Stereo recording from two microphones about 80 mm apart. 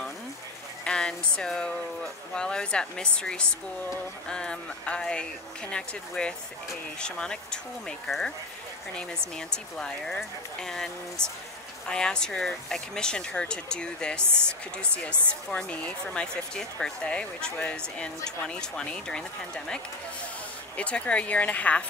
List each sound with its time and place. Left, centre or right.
0.8 s speech: centre
9.5 s speech: centre